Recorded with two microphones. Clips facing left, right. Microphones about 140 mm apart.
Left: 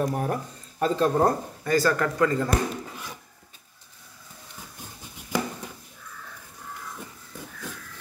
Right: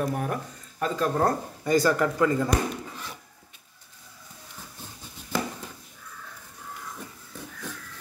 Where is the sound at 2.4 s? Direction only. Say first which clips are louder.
Even; 10° left (ahead or behind).